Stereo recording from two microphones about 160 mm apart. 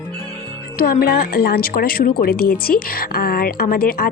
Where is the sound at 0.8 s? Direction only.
70° left (ahead or behind).